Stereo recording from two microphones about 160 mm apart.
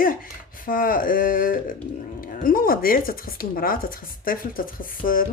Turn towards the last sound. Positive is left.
turn(degrees=60)  # may be behind; listen again after turning